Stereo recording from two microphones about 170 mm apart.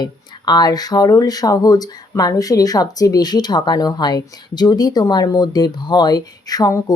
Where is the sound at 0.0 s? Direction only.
25° left (ahead or behind).